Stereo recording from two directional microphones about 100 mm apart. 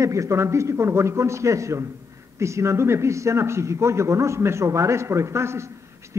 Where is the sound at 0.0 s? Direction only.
30° right (ahead or behind).